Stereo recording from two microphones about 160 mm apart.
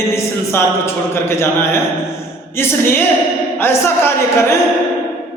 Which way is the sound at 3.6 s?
15° left (ahead or behind).